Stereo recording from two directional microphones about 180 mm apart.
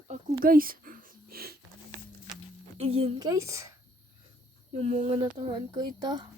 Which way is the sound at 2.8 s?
30° right (ahead or behind).